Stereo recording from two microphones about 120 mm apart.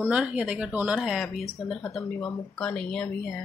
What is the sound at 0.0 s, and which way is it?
Speech, 10° right (ahead or behind).